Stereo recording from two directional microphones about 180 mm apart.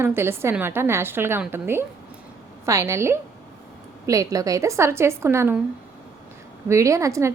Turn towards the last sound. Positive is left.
turn(degrees=-15)  # may be behind; listen again after turning